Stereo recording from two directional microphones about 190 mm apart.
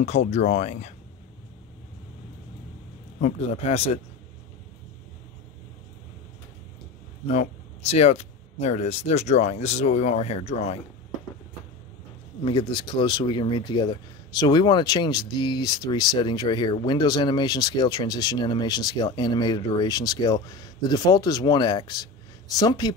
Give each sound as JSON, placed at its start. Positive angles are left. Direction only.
{"t": 0.0, "sound": "speech", "side_deg": 35}
{"t": 3.2, "sound": "speech", "side_deg": 35}
{"t": 7.2, "sound": "speech", "side_deg": 35}
{"t": 12.4, "sound": "speech", "side_deg": 25}